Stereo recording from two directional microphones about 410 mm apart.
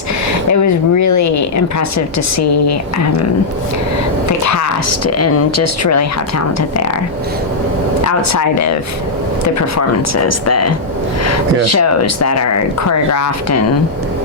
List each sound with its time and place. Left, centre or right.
0.5 s speech: left
4.3 s speech: left
8.0 s speech: left